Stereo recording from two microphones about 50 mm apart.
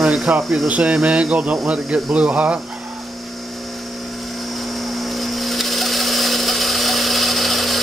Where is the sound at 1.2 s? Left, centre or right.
Centre.